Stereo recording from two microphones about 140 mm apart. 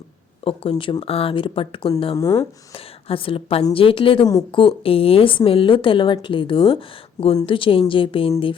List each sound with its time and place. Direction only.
0.4 s a woman's voice: 40° left (ahead or behind)
2.1 s speech: 25° left (ahead or behind)
2.7 s a woman's voice: 40° left (ahead or behind)